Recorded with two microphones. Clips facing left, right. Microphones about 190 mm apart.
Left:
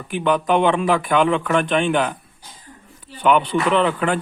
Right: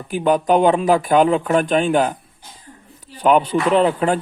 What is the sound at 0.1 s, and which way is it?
Speech, 40° right (ahead or behind).